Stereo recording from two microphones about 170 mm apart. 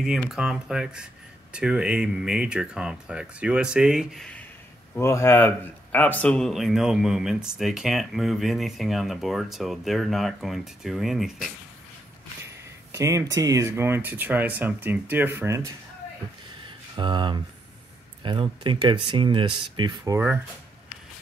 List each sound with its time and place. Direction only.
0.0 s a man's voice: 5° right (ahead or behind)
4.9 s a man's voice: 15° left (ahead or behind); by 11.5 s centre (ahead or behind)
12.9 s speech: 20° right (ahead or behind)
16.6 s a sound: 30° right (ahead or behind)
18.2 s speech: 30° right (ahead or behind)